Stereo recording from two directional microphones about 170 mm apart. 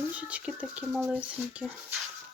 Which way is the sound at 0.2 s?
5° right (ahead or behind).